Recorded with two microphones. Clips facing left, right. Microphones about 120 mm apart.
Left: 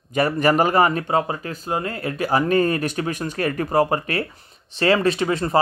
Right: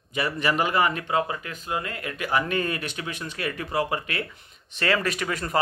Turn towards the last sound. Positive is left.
turn(degrees=30)  # may be behind; listen again after turning